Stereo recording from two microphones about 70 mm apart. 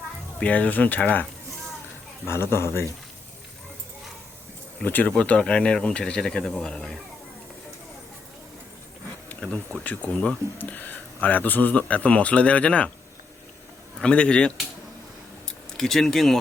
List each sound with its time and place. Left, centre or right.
0.3 s speech: left
2.2 s a man's voice: left
4.8 s speech: left
9.4 s speech: centre
10.6 s speech: left
14.0 s speech: centre
15.8 s speech: centre